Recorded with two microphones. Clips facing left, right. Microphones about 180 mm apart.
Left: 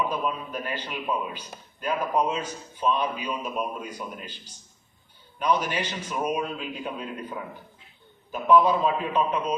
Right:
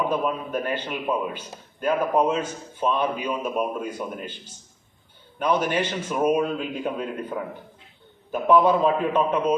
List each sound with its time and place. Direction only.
0.0 s speech: 50° right (ahead or behind)